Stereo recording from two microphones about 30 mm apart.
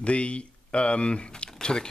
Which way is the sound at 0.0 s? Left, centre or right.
Left.